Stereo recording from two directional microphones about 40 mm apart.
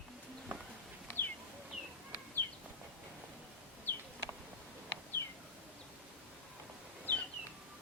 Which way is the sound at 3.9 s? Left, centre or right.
Left.